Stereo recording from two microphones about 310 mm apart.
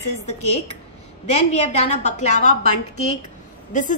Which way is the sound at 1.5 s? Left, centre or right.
Left.